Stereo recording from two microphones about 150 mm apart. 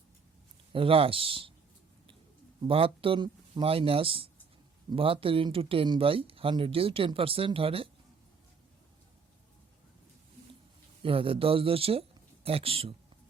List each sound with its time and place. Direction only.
0.7 s speech: 35° right (ahead or behind)
2.6 s speech: 35° right (ahead or behind)
11.0 s speech: 35° right (ahead or behind)